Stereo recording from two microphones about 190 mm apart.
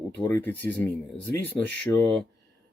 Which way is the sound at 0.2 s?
10° left (ahead or behind).